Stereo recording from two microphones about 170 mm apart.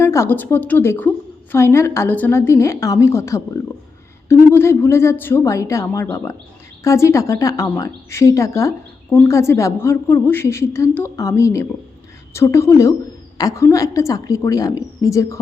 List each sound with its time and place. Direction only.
0.0 s a woman's voice: 15° left (ahead or behind)